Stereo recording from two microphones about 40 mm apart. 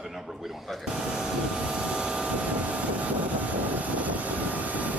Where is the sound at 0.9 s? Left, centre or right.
Centre.